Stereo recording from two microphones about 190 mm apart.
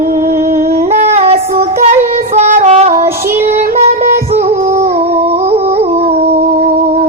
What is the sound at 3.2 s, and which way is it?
Child singing, 35° right (ahead or behind).